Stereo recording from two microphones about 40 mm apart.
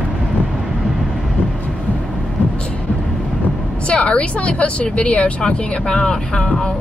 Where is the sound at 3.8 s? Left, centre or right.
Left.